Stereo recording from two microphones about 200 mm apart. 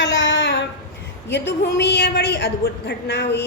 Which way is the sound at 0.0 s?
65° left (ahead or behind).